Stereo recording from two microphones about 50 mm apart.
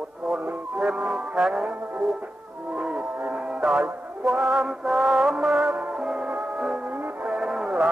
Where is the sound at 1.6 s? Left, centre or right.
Right.